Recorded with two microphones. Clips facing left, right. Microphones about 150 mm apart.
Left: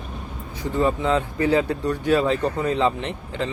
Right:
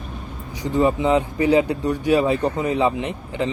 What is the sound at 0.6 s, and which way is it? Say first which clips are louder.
Speech: right 3 dB; 15° right (ahead or behind).